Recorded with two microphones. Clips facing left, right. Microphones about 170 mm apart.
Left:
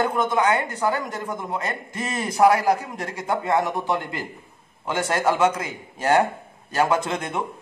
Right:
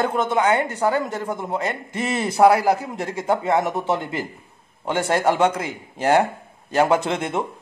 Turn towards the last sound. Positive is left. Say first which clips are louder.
# right 3 dB
turn(degrees=-25)  # may be behind; listen again after turning